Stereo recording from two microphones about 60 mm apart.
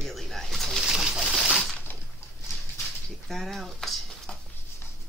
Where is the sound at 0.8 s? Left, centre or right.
Centre.